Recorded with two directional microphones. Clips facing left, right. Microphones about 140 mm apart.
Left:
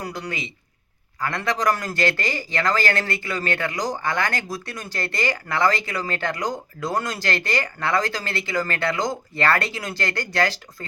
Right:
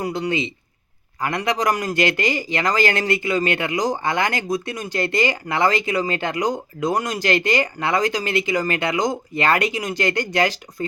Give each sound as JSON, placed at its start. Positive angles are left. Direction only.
{"t": 0.0, "sound": "a man's voice", "side_deg": -25}